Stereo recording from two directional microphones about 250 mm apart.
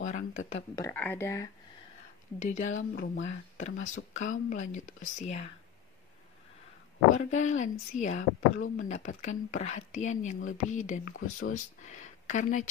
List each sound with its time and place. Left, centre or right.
0.0 s a sound: left
0.7 s speech: centre
2.3 s speech: left
2.7 s speech: left
3.3 s speech: left
3.7 s speech: left
4.2 s speech: left
7.2 s speech: left